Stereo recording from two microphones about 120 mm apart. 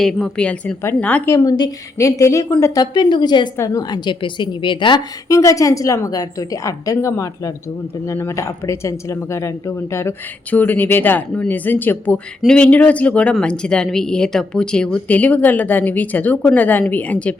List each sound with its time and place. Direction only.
0.0 s speech: 5° left (ahead or behind)
1.3 s a woman's voice: 30° left (ahead or behind)
5.3 s a woman's voice: 25° left (ahead or behind); by 17.3 s 10° left (ahead or behind)